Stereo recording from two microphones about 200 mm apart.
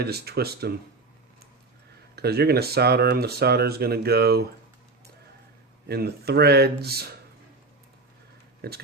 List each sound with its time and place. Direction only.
0.0 s speech: 55° right (ahead or behind)
2.1 s speech: 55° right (ahead or behind)
5.9 s speech: 55° right (ahead or behind)